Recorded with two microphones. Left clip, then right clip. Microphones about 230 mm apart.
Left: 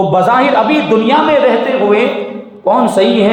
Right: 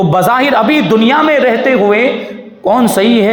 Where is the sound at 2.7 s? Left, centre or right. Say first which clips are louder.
Even; right.